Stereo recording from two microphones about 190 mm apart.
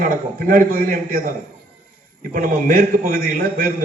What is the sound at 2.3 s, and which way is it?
A man's voice, 45° right (ahead or behind).